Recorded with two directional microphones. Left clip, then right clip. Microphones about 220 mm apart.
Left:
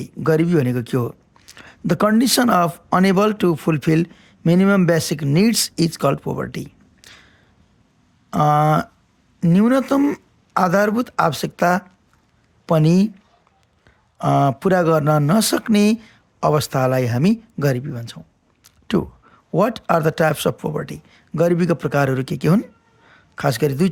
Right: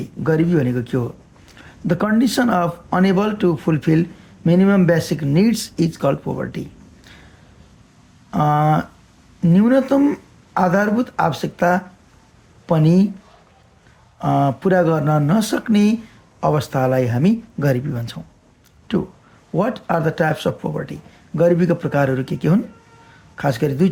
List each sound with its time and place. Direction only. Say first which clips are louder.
0.0 s speech: left 1 dB; 50° left (ahead or behind)
8.3 s speech: left 1 dB; 45° left (ahead or behind)
14.2 s speech: left 1 dB; 45° left (ahead or behind); by 18.2 s 30° left (ahead or behind)
18.9 s speech: left 1 dB; 50° left (ahead or behind)